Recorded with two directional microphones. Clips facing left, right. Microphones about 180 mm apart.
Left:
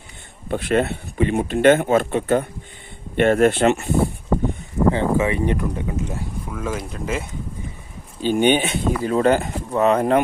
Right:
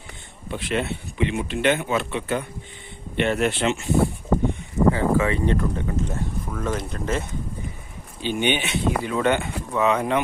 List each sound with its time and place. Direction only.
0.4 s speech: 50° left (ahead or behind)
4.9 s speech: 25° left (ahead or behind); by 7.3 s 5° left (ahead or behind)
8.2 s speech: 45° left (ahead or behind)